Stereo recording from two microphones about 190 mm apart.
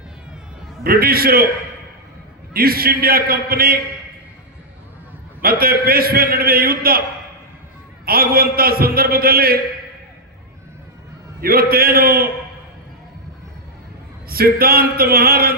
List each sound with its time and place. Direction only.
0.9 s a man's voice: 50° right (ahead or behind)
2.5 s a man's voice: 50° right (ahead or behind)
5.4 s a man's voice: 50° right (ahead or behind)
8.0 s a man's voice: 50° right (ahead or behind)
11.3 s a man's voice: 50° right (ahead or behind)
14.3 s a man's voice: 50° right (ahead or behind)